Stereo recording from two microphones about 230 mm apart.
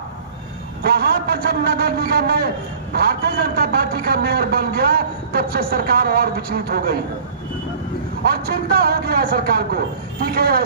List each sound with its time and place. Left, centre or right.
0.9 s a man's voice: right
8.2 s a man's voice: right